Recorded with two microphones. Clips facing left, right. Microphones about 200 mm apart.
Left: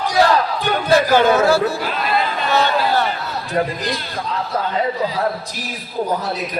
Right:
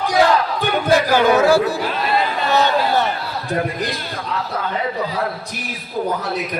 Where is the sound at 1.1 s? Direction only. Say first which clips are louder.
Right 2 dB; 15° right (ahead or behind).